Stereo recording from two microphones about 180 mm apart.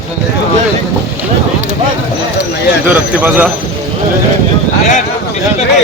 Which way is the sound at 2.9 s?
10° right (ahead or behind).